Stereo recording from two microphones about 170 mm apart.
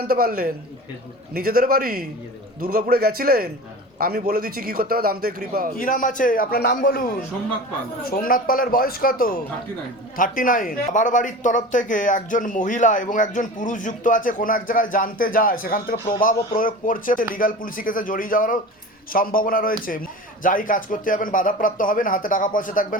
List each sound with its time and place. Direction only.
0.0 s a man's voice: 60° right (ahead or behind)
5.8 s a man's voice: 50° left (ahead or behind)